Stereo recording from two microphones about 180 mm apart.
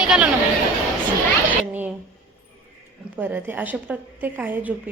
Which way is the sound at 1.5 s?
10° right (ahead or behind).